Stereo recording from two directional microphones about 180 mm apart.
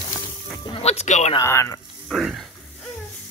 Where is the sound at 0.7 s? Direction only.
35° left (ahead or behind).